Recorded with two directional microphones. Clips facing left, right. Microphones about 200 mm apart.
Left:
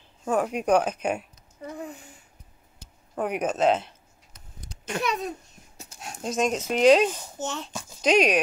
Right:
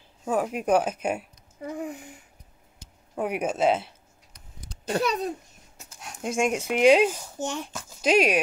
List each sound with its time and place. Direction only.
0.2 s a child's voice: 5° right (ahead or behind)
3.2 s a child's voice: 5° right (ahead or behind)
4.8 s a child's voice: 35° right (ahead or behind)
5.8 s a sound: 25° left (ahead or behind)
6.2 s a child's voice: 10° right (ahead or behind)